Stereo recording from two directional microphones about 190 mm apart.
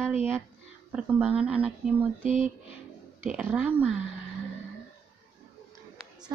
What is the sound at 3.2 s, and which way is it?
Speech, 10° right (ahead or behind).